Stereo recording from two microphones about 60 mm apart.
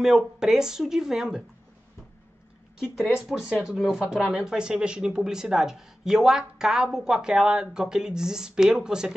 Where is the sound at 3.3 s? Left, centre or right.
Centre.